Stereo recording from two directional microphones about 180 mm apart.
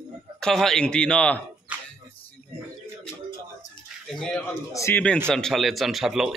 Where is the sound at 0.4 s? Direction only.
5° left (ahead or behind).